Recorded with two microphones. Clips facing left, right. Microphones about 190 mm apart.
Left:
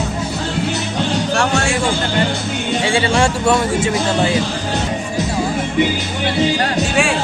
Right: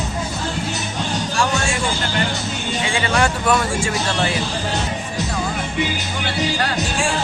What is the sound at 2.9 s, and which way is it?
A man's voice, 30° left (ahead or behind).